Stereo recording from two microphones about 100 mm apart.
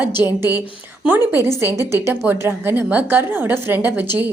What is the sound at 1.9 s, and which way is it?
A woman's voice, 25° right (ahead or behind).